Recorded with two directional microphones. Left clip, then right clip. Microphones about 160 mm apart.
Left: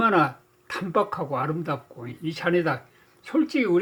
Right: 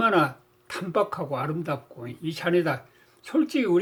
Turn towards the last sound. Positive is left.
turn(degrees=15)  # may be behind; listen again after turning